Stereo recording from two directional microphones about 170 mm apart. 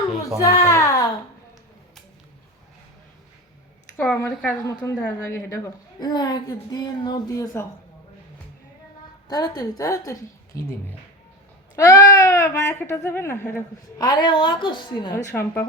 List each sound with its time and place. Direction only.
0.4 s a sound: 15° left (ahead or behind)
3.9 s a woman's voice: 10° left (ahead or behind)
9.3 s a woman's voice: 20° left (ahead or behind)
11.8 s speech: 20° left (ahead or behind)
14.0 s a woman's voice: 25° left (ahead or behind)
15.1 s speech: 15° left (ahead or behind)